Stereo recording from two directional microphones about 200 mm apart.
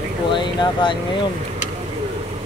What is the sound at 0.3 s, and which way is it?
Speech, 25° left (ahead or behind).